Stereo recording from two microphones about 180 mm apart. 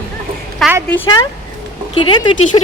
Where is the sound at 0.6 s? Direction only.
Centre (ahead or behind).